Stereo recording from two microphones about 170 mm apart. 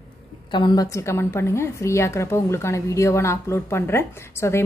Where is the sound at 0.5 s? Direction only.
25° left (ahead or behind).